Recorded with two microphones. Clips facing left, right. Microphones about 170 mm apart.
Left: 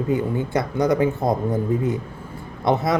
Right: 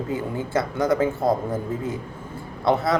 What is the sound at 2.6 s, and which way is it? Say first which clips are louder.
Speech: left 1 dB; 20° left (ahead or behind).